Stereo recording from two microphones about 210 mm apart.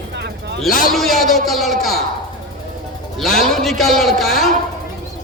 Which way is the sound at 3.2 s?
Centre (ahead or behind).